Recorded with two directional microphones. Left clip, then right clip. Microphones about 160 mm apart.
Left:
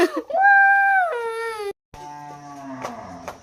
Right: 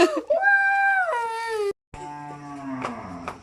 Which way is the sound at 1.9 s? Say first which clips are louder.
Even; centre (ahead or behind).